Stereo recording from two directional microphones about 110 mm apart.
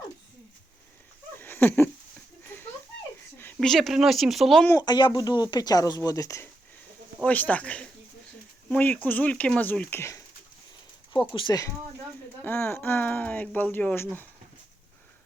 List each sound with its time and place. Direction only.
1.4 s a sound: 20° left (ahead or behind)
3.6 s speech: centre (ahead or behind)
4.9 s speech: 45° left (ahead or behind); by 6.5 s 30° left (ahead or behind)
7.3 s speech: 15° left (ahead or behind)
10.0 s speech: 25° left (ahead or behind)
11.3 s speech: 40° left (ahead or behind)
12.4 s speech: 20° left (ahead or behind)